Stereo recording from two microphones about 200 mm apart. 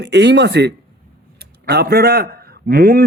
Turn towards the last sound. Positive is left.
turn(degrees=-50)  # may be behind; listen again after turning